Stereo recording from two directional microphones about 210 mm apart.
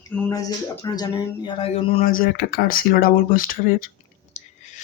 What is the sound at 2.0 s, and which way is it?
Speech, 45° left (ahead or behind).